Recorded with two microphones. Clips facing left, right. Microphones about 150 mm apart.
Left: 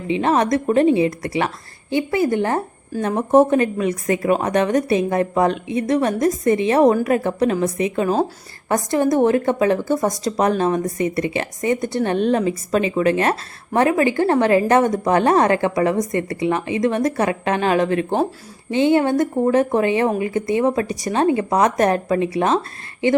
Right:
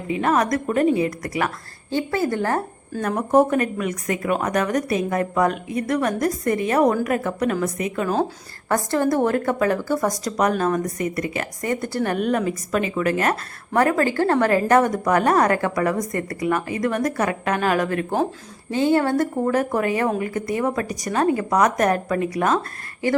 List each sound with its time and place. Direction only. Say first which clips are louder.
0.1 s a woman's voice: left 3 dB; 25° left (ahead or behind)